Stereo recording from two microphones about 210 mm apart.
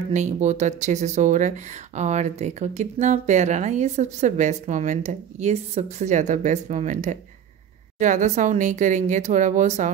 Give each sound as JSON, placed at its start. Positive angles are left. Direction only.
{"t": 0.1, "sound": "speech", "side_deg": -35}